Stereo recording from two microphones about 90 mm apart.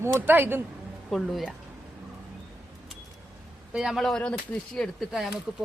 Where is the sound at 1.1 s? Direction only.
5° left (ahead or behind).